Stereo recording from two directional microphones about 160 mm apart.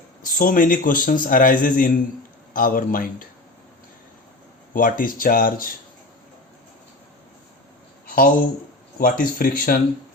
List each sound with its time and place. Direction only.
0.3 s speech: 60° left (ahead or behind)
4.7 s speech: 60° left (ahead or behind)
8.0 s a sound: 65° left (ahead or behind)
9.0 s speech: 65° left (ahead or behind)